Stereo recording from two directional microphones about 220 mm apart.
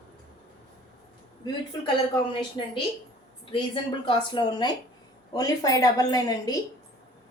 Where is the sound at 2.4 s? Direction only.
20° left (ahead or behind).